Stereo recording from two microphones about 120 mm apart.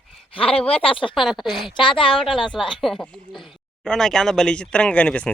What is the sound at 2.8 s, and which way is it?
Speech, centre (ahead or behind).